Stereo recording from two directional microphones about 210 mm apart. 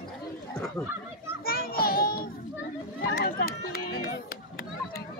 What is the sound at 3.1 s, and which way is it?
Speech, 45° left (ahead or behind).